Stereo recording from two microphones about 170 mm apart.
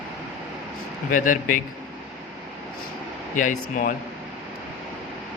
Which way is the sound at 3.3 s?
50° left (ahead or behind).